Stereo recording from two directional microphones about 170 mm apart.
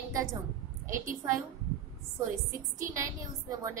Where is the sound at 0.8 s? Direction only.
50° right (ahead or behind).